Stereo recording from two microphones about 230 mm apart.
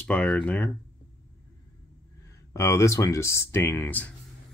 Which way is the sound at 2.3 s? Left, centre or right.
Centre.